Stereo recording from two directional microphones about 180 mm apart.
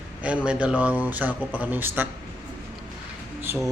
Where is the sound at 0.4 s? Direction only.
5° right (ahead or behind).